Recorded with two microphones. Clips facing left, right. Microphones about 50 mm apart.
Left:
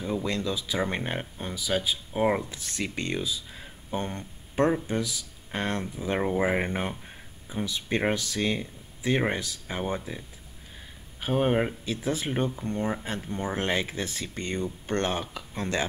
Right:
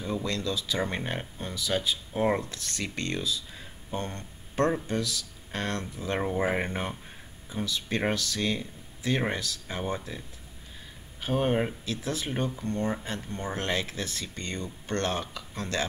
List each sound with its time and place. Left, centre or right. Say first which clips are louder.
0.0 s speech: left 2 dB; centre